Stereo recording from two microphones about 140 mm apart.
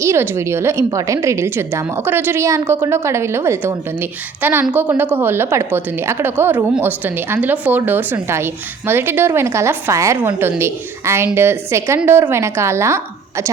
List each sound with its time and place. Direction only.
0.0 s a woman's voice: 20° right (ahead or behind)